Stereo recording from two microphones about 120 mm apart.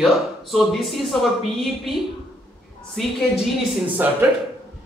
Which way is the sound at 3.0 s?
Centre (ahead or behind).